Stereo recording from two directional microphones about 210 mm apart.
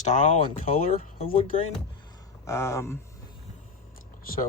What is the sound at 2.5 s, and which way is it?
Speech, 15° left (ahead or behind).